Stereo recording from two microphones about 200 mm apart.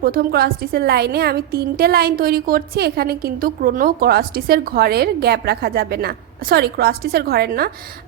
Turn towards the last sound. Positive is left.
turn(degrees=-50)  # may be behind; listen again after turning